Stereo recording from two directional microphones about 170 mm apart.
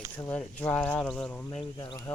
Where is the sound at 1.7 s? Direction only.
25° left (ahead or behind).